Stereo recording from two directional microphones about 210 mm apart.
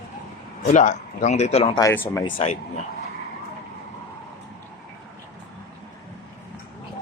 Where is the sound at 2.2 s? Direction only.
25° left (ahead or behind).